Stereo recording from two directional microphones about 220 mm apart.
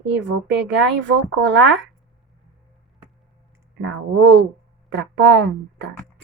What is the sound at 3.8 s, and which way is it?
Speech, 55° right (ahead or behind).